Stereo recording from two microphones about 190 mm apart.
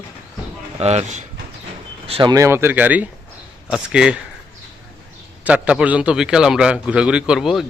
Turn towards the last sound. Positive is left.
turn(degrees=0)  # may be behind; listen again after turning